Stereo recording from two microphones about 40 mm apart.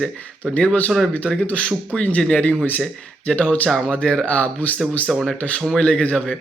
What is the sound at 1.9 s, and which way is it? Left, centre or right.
Speech, left.